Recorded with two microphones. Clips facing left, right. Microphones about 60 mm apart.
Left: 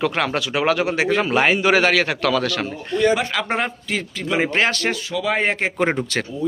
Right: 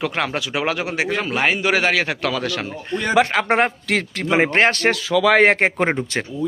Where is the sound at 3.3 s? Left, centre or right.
Right.